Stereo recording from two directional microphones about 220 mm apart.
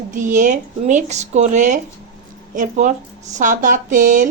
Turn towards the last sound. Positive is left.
turn(degrees=-35)  # may be behind; listen again after turning